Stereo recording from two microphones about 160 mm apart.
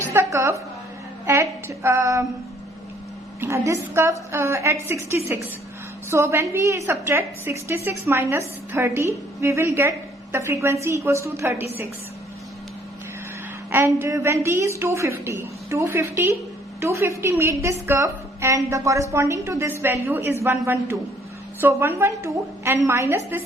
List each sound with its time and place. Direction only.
0.1 s a woman's voice: 15° right (ahead or behind)
1.2 s a sound: 15° right (ahead or behind)
3.4 s a woman's voice: 15° right (ahead or behind)
13.7 s a woman's voice: 15° right (ahead or behind)